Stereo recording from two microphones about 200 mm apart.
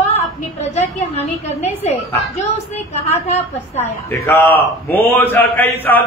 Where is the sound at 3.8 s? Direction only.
10° left (ahead or behind).